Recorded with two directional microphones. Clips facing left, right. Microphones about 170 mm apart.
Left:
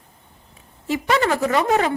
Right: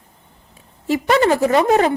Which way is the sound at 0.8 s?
35° right (ahead or behind).